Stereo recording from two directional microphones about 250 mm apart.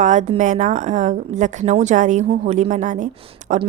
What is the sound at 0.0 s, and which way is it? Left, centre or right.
A woman's voice, right.